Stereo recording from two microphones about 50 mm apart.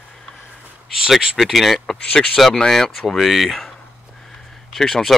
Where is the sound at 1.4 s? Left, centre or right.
Centre.